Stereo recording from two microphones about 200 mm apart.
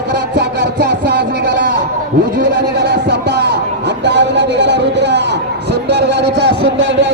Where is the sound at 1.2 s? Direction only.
50° right (ahead or behind).